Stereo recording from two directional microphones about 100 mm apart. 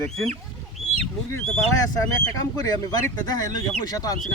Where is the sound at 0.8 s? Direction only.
90° right.